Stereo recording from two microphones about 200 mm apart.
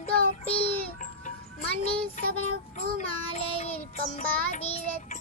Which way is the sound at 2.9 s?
30° left (ahead or behind).